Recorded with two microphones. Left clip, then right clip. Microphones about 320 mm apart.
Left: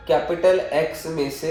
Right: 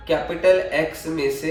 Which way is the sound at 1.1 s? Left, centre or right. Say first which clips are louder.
Left 1 dB; centre.